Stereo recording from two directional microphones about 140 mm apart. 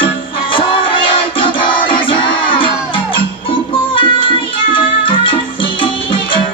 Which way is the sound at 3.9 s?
40° left (ahead or behind).